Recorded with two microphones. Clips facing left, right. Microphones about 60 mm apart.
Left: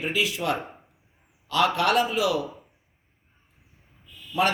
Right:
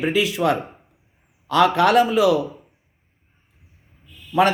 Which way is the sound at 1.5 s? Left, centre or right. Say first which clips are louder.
Right 6 dB; right.